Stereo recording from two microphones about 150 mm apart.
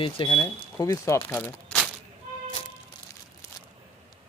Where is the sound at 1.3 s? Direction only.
5° left (ahead or behind).